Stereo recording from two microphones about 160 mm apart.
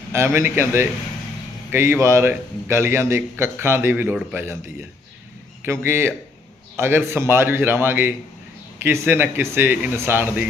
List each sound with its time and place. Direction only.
0.3 s a man's voice: 15° right (ahead or behind)
5.6 s a man's voice: 15° right (ahead or behind)